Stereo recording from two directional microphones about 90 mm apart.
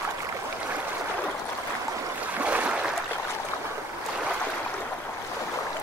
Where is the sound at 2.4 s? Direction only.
15° right (ahead or behind).